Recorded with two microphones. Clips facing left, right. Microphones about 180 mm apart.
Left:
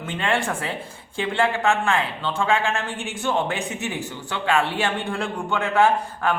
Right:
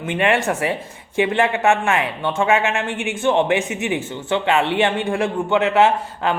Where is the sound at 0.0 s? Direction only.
20° right (ahead or behind).